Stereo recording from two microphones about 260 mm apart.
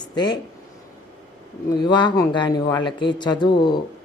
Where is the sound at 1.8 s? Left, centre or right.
Centre.